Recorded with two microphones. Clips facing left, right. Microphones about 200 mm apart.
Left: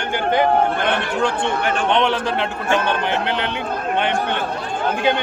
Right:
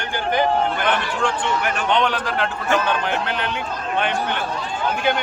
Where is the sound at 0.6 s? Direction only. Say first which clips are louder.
Left 2 dB; 60° left (ahead or behind).